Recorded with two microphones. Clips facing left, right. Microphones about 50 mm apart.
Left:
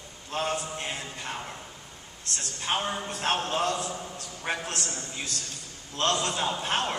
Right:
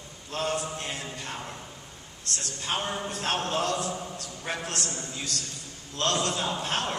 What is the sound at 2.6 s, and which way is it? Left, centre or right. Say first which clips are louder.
A man's voice: left 2 dB; centre.